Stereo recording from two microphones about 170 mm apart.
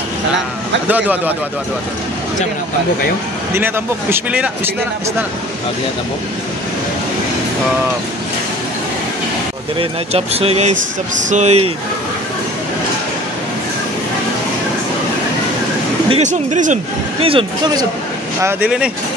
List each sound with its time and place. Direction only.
0.8 s a man's voice: 10° right (ahead or behind)
3.5 s a man's voice: 15° right (ahead or behind)
9.8 s speech: 35° right (ahead or behind)
16.1 s speech: 45° right (ahead or behind)
17.2 s speech: 30° right (ahead or behind)
18.4 s a man's voice: 5° right (ahead or behind)